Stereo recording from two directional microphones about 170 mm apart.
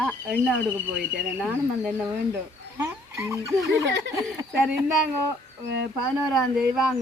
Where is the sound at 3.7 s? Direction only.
90° right.